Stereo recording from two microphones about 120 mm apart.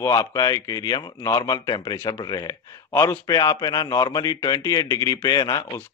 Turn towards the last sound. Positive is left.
turn(degrees=30)  # may be behind; listen again after turning